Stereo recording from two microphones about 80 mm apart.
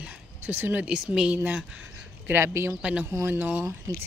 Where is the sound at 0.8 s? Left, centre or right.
Centre.